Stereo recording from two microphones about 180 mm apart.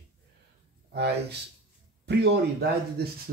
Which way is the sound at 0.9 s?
65° right (ahead or behind).